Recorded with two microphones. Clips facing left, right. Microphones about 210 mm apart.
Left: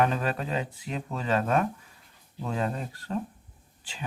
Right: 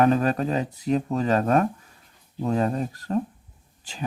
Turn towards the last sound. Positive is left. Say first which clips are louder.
# right 6 dB
turn(degrees=-40)  # may be behind; listen again after turning